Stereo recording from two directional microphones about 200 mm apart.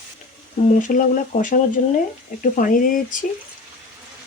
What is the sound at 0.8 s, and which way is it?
Speech, 40° left (ahead or behind).